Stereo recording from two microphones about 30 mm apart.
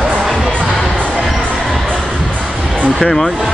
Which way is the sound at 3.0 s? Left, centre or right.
Centre.